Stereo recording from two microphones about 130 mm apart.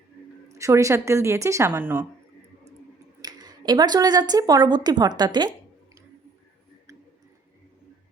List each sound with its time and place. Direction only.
0.5 s a woman's voice: 25° right (ahead or behind)
3.2 s speech: 30° right (ahead or behind)